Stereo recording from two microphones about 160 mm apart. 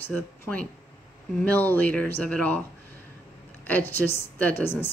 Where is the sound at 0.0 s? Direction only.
10° left (ahead or behind).